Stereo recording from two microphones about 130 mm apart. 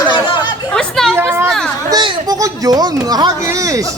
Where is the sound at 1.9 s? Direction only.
35° right (ahead or behind).